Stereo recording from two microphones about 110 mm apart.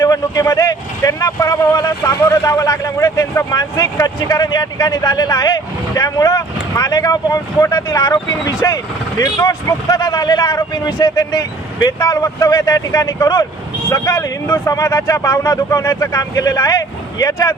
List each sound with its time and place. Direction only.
0.0 s speech: 30° left (ahead or behind)